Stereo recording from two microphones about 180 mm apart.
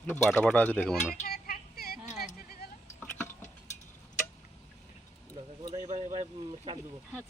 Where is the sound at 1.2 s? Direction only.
60° left (ahead or behind).